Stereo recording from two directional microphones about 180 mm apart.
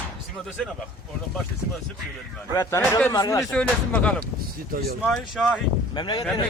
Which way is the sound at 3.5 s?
5° left (ahead or behind).